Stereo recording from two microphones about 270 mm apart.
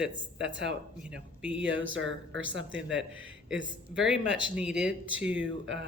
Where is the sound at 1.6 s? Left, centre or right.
Right.